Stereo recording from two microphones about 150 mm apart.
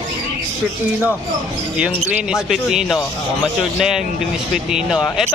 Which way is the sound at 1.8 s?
10° right (ahead or behind).